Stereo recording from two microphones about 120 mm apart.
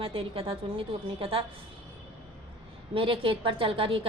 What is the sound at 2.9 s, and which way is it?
A woman's voice, 50° right (ahead or behind).